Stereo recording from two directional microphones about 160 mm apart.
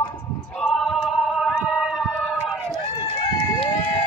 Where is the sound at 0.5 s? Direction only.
Centre (ahead or behind).